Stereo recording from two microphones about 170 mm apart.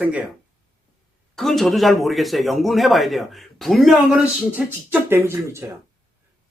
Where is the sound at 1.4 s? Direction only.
Centre (ahead or behind).